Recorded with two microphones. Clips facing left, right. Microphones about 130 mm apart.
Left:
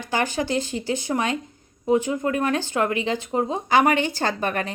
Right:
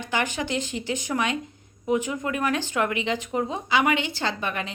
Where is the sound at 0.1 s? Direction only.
35° left (ahead or behind).